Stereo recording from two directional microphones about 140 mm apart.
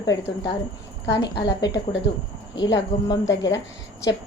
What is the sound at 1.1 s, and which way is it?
A woman's voice, 30° left (ahead or behind).